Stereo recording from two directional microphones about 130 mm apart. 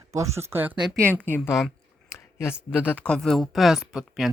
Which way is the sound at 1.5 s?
5° right (ahead or behind).